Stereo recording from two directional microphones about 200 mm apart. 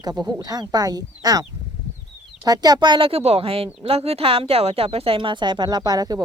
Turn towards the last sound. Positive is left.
turn(degrees=-20)  # may be behind; listen again after turning